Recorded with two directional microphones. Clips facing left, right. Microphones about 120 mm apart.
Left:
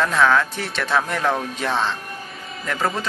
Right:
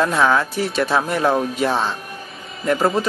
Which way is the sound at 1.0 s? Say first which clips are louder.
Right 2 dB; 15° right (ahead or behind).